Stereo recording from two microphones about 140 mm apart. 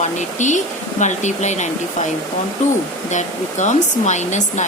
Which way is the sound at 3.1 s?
60° left (ahead or behind).